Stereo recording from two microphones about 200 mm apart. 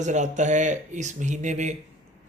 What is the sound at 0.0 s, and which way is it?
Speech, 35° right (ahead or behind).